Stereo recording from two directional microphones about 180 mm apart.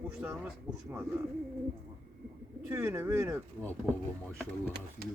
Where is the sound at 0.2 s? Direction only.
5° right (ahead or behind).